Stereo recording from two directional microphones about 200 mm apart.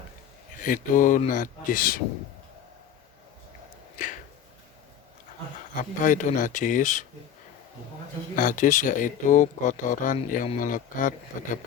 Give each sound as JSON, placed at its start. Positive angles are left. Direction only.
{"t": 0.6, "sound": "speech", "side_deg": 40}
{"t": 3.9, "sound": "a sound", "side_deg": 40}
{"t": 5.7, "sound": "speech", "side_deg": 40}
{"t": 8.4, "sound": "speech", "side_deg": 40}